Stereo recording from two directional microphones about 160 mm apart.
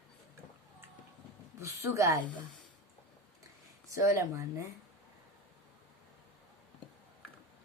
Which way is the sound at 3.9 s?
20° right (ahead or behind).